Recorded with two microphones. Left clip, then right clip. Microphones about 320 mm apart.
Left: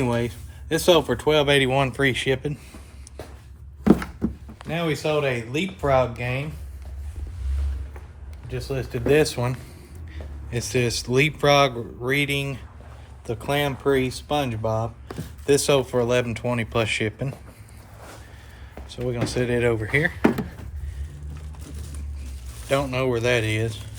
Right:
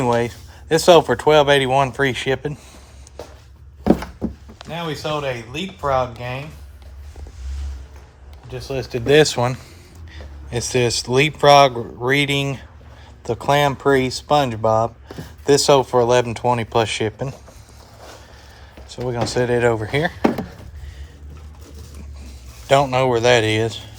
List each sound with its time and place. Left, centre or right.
0.0 s speech: centre
4.7 s speech: centre
8.7 s speech: right
10.1 s speech: centre
19.0 s speech: centre
22.7 s speech: centre